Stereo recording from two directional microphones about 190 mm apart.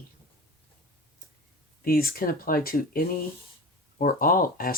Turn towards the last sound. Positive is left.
turn(degrees=50)  # may be behind; listen again after turning